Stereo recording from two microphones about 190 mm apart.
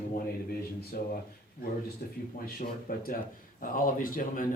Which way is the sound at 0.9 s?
50° left (ahead or behind).